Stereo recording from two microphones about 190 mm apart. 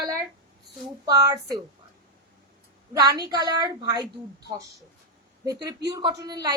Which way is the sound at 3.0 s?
20° right (ahead or behind).